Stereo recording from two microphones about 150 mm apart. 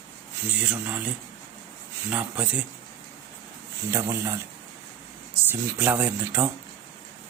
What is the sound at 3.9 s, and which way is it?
Speech, 20° right (ahead or behind).